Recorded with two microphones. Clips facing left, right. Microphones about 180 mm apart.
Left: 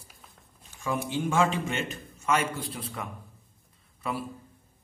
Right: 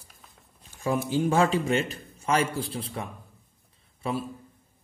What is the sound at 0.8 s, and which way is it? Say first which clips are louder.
A man's voice: right 4 dB; 35° right (ahead or behind).